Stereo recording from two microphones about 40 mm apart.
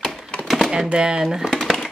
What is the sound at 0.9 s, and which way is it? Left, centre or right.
Speech, right.